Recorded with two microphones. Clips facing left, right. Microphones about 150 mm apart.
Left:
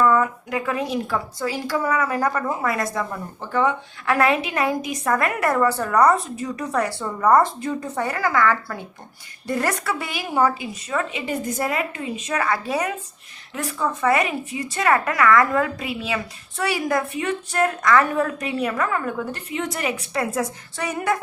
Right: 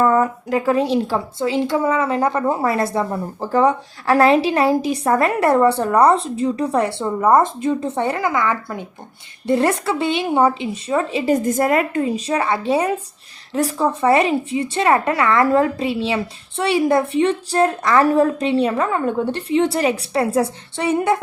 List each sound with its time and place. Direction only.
0.0 s speech: 40° right (ahead or behind)
11.4 s a woman's voice: 50° right (ahead or behind); by 21.2 s 25° right (ahead or behind)